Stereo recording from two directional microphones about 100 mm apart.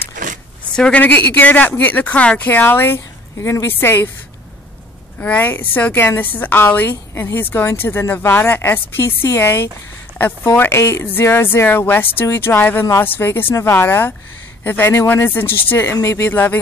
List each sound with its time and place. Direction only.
0.7 s a woman's voice: 10° left (ahead or behind)
5.2 s a woman's voice: 15° left (ahead or behind)